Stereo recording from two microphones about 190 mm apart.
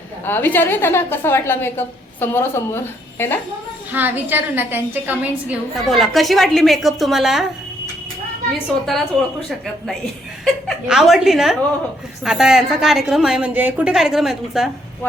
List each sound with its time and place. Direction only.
0.3 s a woman's voice: 10° left (ahead or behind)
3.9 s a woman's voice: 10° right (ahead or behind)
10.4 s a woman's voice: centre (ahead or behind)